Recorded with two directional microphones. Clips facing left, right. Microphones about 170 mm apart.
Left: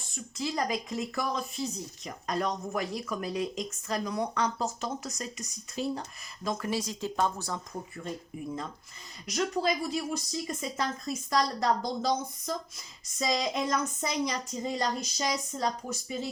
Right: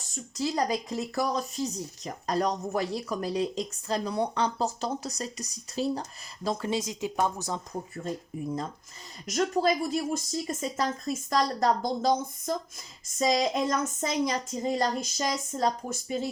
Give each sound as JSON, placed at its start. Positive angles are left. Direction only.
{"t": 0.1, "sound": "speech", "side_deg": -35}
{"t": 9.2, "sound": "speech", "side_deg": -45}